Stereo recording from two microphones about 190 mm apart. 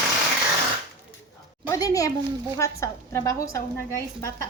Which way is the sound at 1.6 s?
15° left (ahead or behind).